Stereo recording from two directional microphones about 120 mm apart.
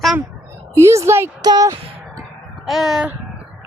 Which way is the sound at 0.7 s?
25° right (ahead or behind).